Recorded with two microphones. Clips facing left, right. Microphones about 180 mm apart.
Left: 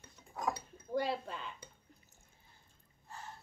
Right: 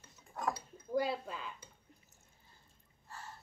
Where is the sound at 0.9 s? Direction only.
Centre (ahead or behind).